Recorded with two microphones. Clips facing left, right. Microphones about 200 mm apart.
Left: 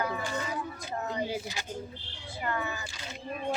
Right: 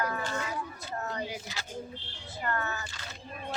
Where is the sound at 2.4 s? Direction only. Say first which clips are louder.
Even; 10° left (ahead or behind).